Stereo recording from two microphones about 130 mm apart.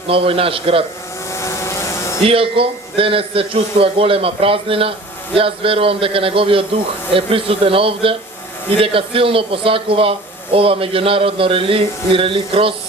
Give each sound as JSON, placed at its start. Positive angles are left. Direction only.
{"t": 0.1, "sound": "a man's voice", "side_deg": -45}
{"t": 1.3, "sound": "a sound", "side_deg": 20}
{"t": 2.2, "sound": "a man's voice", "side_deg": -45}